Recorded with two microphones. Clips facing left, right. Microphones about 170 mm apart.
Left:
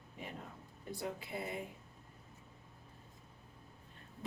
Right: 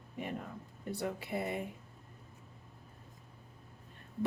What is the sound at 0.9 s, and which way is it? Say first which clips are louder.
Speech: right 5 dB; 65° right (ahead or behind).